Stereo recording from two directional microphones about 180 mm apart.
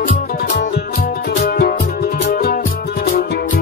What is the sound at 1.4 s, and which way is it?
Music, 60° left (ahead or behind).